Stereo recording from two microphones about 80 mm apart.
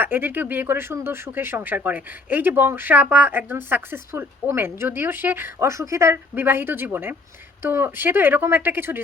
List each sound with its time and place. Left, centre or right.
0.0 s speech: right